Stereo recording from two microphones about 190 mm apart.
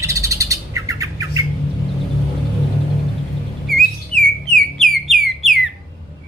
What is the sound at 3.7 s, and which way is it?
Bird, 5° left (ahead or behind).